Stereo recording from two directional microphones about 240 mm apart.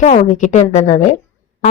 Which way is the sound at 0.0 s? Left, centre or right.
Left.